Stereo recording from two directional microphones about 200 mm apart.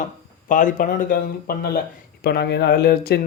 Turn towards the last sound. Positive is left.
turn(degrees=50)  # may be behind; listen again after turning